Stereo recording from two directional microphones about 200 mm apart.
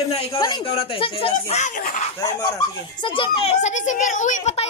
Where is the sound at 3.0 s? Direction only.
25° left (ahead or behind).